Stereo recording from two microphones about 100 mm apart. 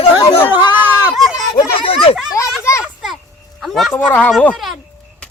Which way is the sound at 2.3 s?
30° left (ahead or behind).